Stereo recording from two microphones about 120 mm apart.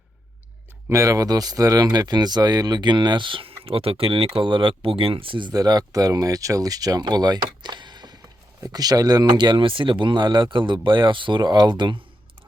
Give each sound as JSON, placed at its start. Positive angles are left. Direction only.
{"t": 0.9, "sound": "speech", "side_deg": -25}